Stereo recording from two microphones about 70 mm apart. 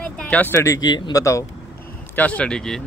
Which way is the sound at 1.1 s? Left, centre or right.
Left.